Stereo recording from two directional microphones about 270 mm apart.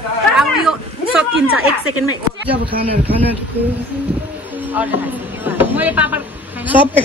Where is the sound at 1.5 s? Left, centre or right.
Right.